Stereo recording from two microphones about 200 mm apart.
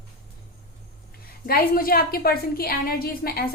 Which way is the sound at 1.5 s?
45° left (ahead or behind).